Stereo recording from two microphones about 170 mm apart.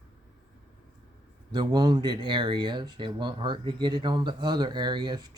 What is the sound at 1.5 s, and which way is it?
Speech, 25° right (ahead or behind).